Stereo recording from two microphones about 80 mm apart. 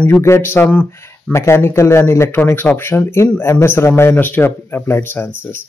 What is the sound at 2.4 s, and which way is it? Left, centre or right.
Speech, left.